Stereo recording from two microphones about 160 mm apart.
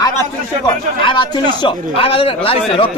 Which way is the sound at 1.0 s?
30° left (ahead or behind).